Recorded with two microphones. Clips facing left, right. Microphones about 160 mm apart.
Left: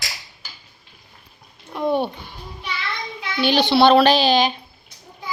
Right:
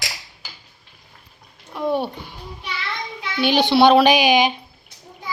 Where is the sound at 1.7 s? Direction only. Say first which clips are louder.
Left 1 dB; 5° right (ahead or behind).